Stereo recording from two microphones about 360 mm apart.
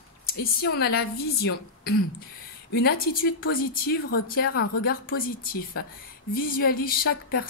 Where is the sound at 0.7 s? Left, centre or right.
Left.